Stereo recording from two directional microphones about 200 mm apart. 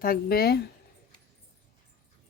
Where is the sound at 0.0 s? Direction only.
50° left (ahead or behind).